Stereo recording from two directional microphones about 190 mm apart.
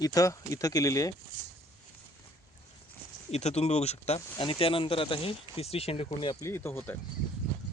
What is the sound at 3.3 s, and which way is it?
Speech, 35° left (ahead or behind).